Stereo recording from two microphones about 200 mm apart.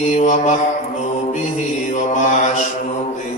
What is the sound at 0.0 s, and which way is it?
Mantra, 35° left (ahead or behind).